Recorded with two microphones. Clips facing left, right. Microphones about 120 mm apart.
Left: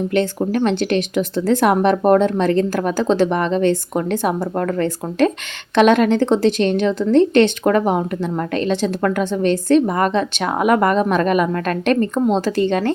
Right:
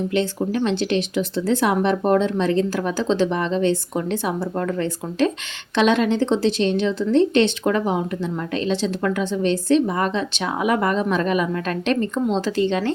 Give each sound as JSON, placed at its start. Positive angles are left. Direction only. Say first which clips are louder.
{"t": 0.1, "sound": "speech", "louder": "left 3 dB", "side_deg": 55}